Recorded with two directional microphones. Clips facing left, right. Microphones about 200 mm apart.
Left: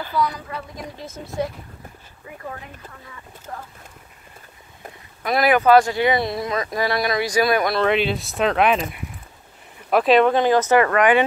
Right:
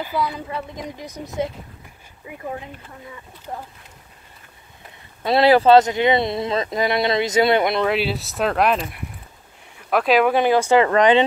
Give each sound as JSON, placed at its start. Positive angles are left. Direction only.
{"t": 0.2, "sound": "speech", "side_deg": -25}
{"t": 3.5, "sound": "speech", "side_deg": -25}
{"t": 5.2, "sound": "speech", "side_deg": -30}
{"t": 7.8, "sound": "speech", "side_deg": -5}